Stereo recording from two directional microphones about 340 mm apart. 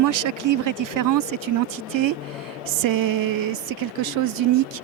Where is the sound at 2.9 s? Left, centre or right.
Right.